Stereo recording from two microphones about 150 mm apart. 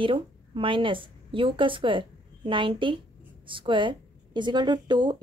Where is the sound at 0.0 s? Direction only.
35° right (ahead or behind).